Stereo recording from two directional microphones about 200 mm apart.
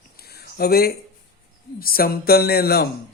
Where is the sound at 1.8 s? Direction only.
50° left (ahead or behind).